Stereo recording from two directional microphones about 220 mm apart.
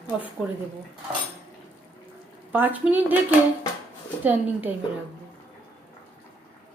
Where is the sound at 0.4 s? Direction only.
5° right (ahead or behind).